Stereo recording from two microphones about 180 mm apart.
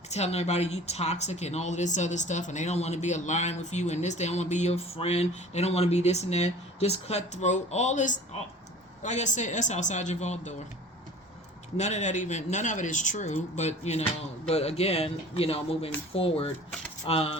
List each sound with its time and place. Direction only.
0.1 s speech: 35° left (ahead or behind)
11.8 s speech: 40° left (ahead or behind)